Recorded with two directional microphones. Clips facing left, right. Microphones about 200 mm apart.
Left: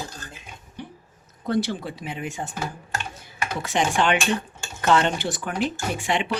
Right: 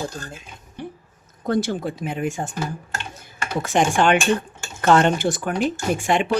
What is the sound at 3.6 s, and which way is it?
Speech, 50° right (ahead or behind).